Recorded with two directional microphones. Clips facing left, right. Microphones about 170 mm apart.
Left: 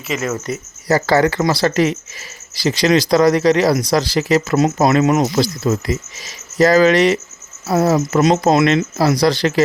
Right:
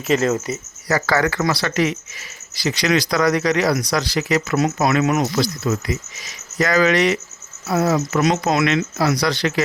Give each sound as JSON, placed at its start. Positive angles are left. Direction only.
{"t": 0.1, "sound": "speech", "side_deg": -30}
{"t": 0.9, "sound": "speech", "side_deg": 30}